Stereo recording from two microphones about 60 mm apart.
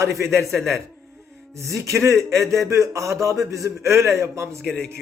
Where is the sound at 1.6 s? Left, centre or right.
Right.